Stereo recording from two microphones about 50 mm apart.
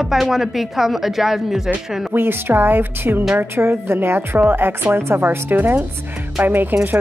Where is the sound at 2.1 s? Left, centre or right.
Right.